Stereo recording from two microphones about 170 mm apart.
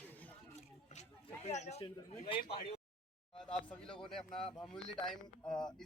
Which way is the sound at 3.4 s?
5° left (ahead or behind).